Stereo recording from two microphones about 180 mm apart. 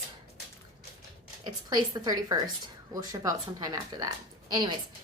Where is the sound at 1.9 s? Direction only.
20° right (ahead or behind).